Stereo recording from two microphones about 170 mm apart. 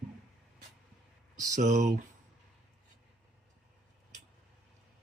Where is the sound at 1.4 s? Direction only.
45° right (ahead or behind).